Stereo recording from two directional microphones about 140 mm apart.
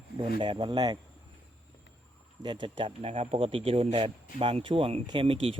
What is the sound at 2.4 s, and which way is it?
A man's voice, 35° right (ahead or behind).